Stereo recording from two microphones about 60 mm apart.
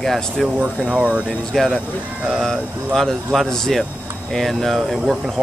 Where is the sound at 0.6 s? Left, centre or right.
Right.